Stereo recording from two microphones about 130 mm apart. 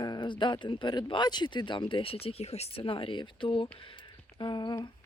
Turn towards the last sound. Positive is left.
turn(degrees=35)  # may be behind; listen again after turning